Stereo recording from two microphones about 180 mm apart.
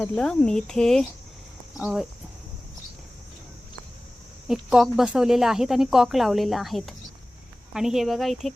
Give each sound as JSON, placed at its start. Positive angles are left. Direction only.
{"t": 0.0, "sound": "speech", "side_deg": 5}
{"t": 4.4, "sound": "speech", "side_deg": -5}